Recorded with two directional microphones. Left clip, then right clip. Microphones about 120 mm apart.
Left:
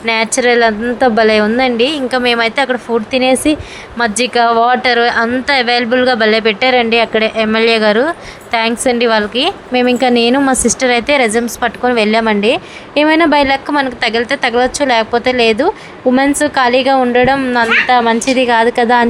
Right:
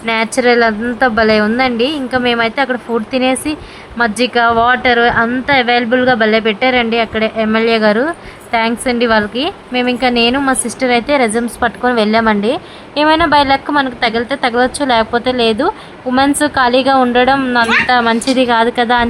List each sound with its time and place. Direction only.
0.0 s a woman's voice: 35° left (ahead or behind)